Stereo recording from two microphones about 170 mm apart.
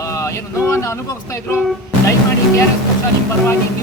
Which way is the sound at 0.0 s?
15° left (ahead or behind).